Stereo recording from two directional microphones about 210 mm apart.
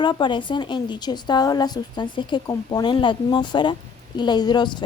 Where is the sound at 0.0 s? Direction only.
20° left (ahead or behind).